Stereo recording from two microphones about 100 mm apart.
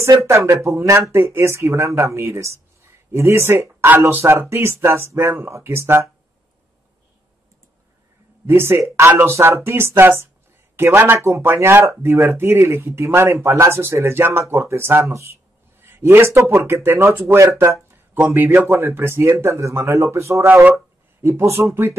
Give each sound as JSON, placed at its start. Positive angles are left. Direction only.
{"t": 0.0, "sound": "speech", "side_deg": -30}
{"t": 8.5, "sound": "speech", "side_deg": -25}